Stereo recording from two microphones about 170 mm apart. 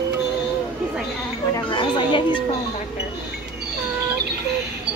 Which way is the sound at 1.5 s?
25° left (ahead or behind).